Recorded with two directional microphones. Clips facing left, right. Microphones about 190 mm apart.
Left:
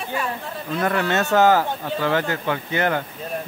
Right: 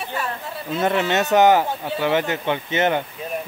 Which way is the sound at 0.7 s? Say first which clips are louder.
Right 1 dB; 20° right (ahead or behind).